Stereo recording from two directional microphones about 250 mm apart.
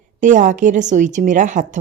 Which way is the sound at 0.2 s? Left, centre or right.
Right.